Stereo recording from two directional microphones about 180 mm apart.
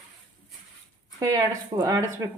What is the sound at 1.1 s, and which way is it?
Speech, 20° right (ahead or behind).